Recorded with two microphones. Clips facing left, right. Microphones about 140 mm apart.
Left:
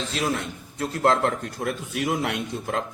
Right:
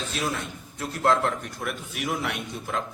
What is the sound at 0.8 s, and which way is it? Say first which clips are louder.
Speech: left 2 dB; 25° left (ahead or behind).